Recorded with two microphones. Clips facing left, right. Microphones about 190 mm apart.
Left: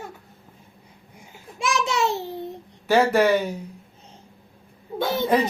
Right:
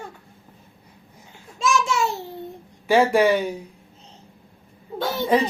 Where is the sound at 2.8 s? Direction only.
Centre (ahead or behind).